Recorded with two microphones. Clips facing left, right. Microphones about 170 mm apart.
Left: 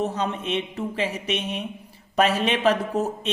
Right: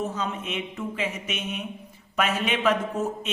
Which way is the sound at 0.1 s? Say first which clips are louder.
Left 4 dB; 35° left (ahead or behind).